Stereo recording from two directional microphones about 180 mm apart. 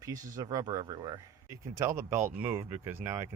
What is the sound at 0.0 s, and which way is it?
Speech, 20° right (ahead or behind).